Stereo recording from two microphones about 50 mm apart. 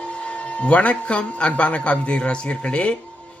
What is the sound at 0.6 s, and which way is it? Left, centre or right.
A woman's voice, left.